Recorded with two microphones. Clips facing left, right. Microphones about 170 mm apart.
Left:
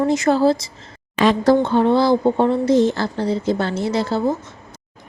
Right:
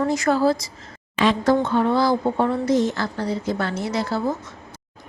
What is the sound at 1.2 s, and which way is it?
Speech, 40° left (ahead or behind).